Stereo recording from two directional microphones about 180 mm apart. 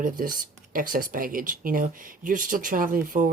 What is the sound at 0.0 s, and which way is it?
Speech, 50° right (ahead or behind).